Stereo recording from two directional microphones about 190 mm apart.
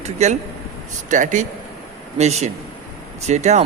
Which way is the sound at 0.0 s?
35° right (ahead or behind).